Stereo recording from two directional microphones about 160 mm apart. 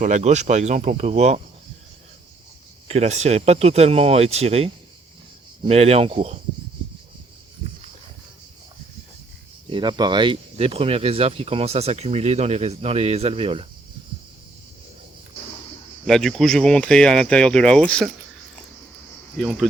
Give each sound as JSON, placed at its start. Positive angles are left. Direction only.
{"t": 0.0, "sound": "speech", "side_deg": -50}
{"t": 2.8, "sound": "speech", "side_deg": -45}
{"t": 9.7, "sound": "speech", "side_deg": -30}
{"t": 16.0, "sound": "speech", "side_deg": 5}